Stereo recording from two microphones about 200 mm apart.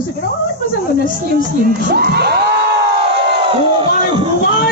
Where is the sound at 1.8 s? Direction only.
55° right (ahead or behind).